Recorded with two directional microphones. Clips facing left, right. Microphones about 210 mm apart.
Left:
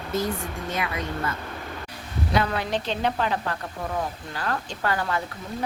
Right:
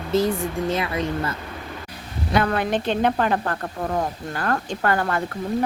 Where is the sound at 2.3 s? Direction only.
55° right (ahead or behind).